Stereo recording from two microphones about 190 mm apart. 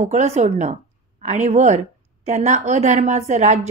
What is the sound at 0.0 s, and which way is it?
A woman's voice, 40° right (ahead or behind).